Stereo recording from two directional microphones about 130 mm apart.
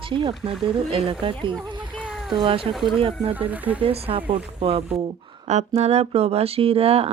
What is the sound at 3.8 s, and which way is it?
Speech, 45° right (ahead or behind).